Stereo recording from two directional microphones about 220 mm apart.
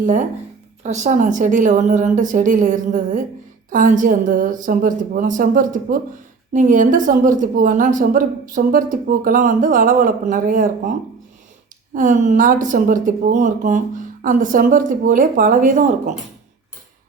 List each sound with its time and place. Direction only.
0.0 s a woman's voice: 35° right (ahead or behind)
11.9 s a woman's voice: 35° right (ahead or behind)